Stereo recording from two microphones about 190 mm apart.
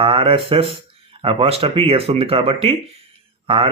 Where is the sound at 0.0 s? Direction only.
30° right (ahead or behind).